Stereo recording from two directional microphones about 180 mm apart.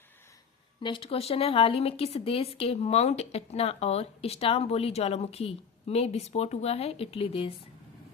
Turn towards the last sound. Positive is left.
turn(degrees=30)  # may be behind; listen again after turning